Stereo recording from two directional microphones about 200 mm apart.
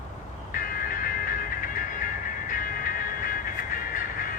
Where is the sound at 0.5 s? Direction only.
45° left (ahead or behind).